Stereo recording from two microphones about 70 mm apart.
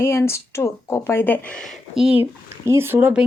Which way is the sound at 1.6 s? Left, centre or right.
Centre.